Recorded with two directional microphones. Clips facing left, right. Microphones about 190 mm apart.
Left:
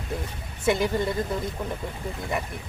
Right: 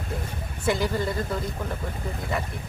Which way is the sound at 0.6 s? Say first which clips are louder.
Left 2 dB; 20° left (ahead or behind).